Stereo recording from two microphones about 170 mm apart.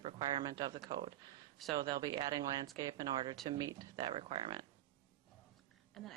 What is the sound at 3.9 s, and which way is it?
Speech, 35° right (ahead or behind).